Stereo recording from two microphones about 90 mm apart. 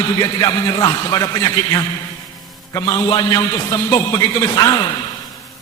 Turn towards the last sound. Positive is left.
turn(degrees=50)  # may be behind; listen again after turning